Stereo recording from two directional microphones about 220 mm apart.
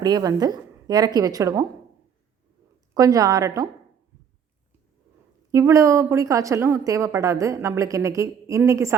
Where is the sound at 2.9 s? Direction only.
15° right (ahead or behind).